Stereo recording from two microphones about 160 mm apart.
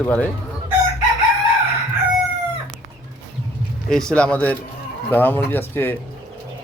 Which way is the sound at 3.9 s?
5° left (ahead or behind).